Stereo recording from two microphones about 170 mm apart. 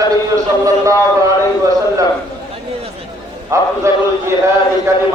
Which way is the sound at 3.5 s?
15° right (ahead or behind).